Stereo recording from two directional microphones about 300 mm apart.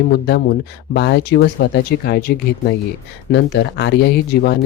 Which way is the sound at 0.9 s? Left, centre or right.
Left.